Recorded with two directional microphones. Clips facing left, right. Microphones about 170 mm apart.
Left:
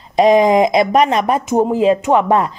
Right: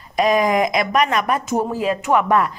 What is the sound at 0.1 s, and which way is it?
Speech, 25° left (ahead or behind).